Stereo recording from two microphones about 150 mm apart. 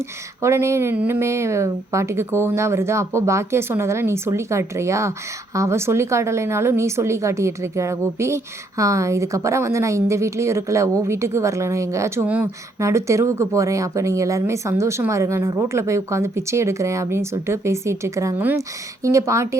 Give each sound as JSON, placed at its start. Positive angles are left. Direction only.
{"t": 0.4, "sound": "a woman's voice", "side_deg": -20}